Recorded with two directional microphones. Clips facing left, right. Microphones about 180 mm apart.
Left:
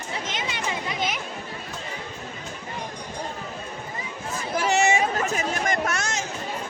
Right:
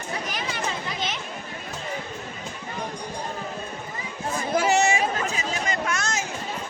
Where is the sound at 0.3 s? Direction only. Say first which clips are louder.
Even; 20° left (ahead or behind).